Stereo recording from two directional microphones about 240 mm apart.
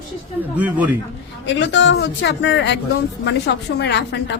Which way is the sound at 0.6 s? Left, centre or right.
Centre.